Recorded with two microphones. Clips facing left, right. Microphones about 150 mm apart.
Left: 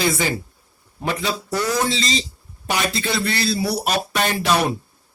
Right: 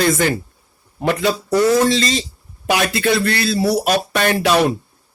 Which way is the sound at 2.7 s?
70° right (ahead or behind).